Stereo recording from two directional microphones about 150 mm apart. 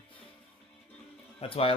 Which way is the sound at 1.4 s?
40° left (ahead or behind).